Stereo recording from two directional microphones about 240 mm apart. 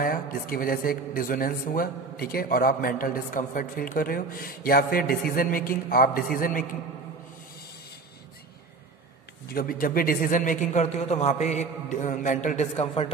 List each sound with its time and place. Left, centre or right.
0.0 s a man's voice: left
9.5 s a man's voice: left